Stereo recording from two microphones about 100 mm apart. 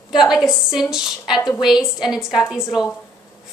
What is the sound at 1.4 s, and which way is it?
Speech, 45° left (ahead or behind).